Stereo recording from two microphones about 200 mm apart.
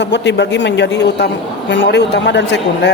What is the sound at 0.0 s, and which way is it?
A man's voice, 60° left (ahead or behind).